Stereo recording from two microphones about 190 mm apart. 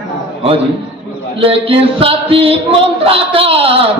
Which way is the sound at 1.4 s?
30° right (ahead or behind).